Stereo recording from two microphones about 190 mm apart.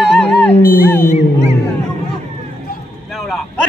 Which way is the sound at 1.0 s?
35° left (ahead or behind).